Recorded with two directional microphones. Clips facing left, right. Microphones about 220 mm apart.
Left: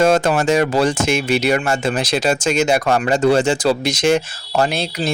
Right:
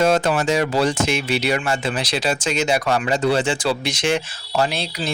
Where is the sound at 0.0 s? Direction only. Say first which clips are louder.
Left 3 dB; 45° left (ahead or behind).